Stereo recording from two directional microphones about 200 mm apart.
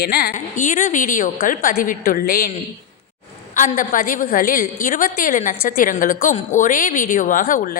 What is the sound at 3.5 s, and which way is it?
A woman's voice, 40° left (ahead or behind).